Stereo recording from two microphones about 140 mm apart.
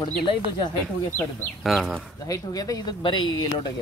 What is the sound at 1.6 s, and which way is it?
Speech, centre (ahead or behind).